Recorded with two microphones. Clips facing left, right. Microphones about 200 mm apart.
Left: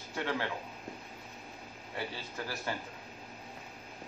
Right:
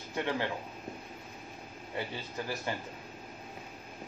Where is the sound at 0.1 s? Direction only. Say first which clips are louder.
Right 2 dB; 20° right (ahead or behind).